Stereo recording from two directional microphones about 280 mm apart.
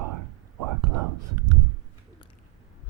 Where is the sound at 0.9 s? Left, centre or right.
Right.